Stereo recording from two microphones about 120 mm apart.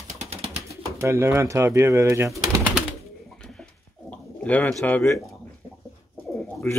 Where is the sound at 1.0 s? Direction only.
20° right (ahead or behind).